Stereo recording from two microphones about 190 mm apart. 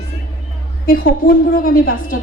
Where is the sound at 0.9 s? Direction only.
50° left (ahead or behind).